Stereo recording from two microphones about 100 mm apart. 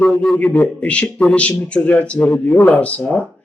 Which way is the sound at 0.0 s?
5° left (ahead or behind).